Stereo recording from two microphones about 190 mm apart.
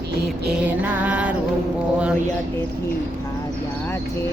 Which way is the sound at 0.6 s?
10° right (ahead or behind).